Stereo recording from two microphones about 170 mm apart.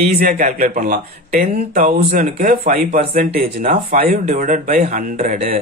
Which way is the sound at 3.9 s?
45° right (ahead or behind).